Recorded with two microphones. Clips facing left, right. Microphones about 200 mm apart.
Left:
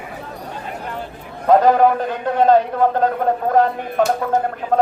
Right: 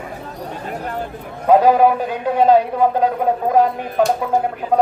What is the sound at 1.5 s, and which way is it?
A man's voice, 10° right (ahead or behind).